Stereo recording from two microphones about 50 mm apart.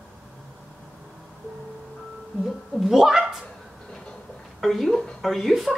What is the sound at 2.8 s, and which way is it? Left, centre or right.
Speech, centre.